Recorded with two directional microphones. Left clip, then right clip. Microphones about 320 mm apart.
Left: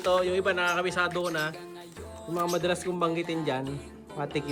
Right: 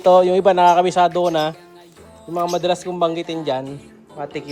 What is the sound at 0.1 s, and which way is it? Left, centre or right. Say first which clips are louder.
Speech: right 13 dB; centre.